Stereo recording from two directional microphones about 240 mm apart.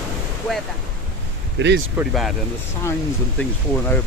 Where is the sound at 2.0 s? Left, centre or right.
Centre.